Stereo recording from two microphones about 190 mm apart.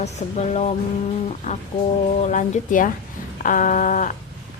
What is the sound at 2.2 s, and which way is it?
A woman's voice, 40° left (ahead or behind).